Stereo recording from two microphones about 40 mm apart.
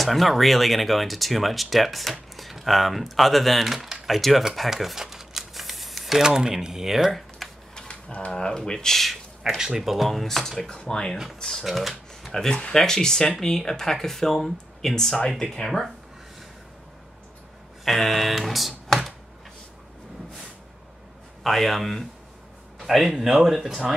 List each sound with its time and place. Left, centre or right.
0.0 s speech: centre
5.0 s crumpling: centre
6.1 s speech: centre
7.1 s computer keyboard: centre
7.9 s mechanisms: left
8.3 s speech: centre
9.6 s speech: centre
11.6 s speech: centre
12.3 s speech: centre
17.8 s speech: centre
21.4 s speech: centre
22.8 s speech: centre